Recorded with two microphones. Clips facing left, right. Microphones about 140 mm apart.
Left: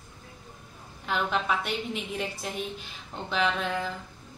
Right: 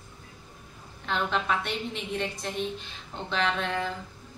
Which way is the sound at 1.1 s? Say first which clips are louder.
Even; 5° left (ahead or behind).